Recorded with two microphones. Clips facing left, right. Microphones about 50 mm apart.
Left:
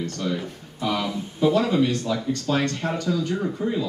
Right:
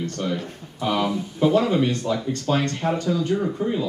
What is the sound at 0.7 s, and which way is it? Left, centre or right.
Speech, right.